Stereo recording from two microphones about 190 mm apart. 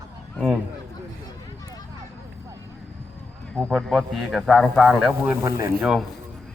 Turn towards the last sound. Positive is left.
turn(degrees=-15)  # may be behind; listen again after turning